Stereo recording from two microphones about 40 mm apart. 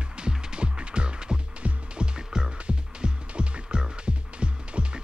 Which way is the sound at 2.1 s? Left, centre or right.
Centre.